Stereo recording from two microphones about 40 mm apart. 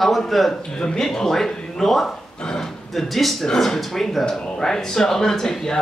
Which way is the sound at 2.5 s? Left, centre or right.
Centre.